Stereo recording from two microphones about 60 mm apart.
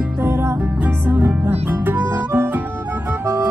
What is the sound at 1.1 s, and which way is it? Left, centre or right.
Music, right.